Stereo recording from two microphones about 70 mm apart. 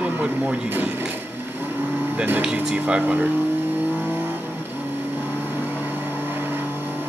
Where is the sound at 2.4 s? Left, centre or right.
Centre.